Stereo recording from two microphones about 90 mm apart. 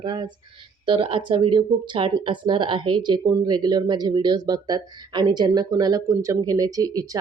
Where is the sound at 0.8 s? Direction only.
80° right.